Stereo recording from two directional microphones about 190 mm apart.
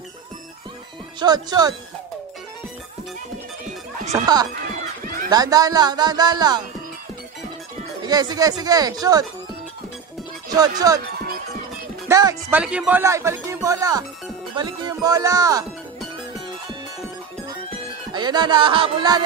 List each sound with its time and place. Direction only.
1.2 s speech: 20° right (ahead or behind)
4.1 s speech: 20° right (ahead or behind)
5.0 s a sound: 45° right (ahead or behind)
5.3 s speech: 20° right (ahead or behind)
8.0 s speech: 20° right (ahead or behind)
10.8 s speech: 20° right (ahead or behind)
12.1 s speech: 15° right (ahead or behind)
18.1 s speech: 25° right (ahead or behind)